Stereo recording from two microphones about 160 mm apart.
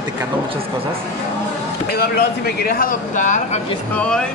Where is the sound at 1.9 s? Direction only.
75° left (ahead or behind); by 3.6 s 50° left (ahead or behind).